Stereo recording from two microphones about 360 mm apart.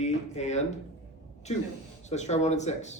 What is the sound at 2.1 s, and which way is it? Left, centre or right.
Speech, centre.